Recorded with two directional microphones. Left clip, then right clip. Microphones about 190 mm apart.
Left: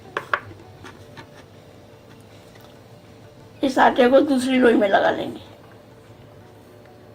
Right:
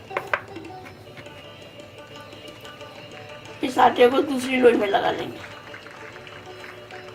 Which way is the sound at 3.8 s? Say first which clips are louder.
Left 2 dB; 30° left (ahead or behind).